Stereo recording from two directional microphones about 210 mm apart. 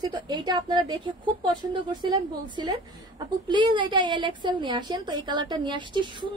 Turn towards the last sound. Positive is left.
turn(degrees=-20)  # may be behind; listen again after turning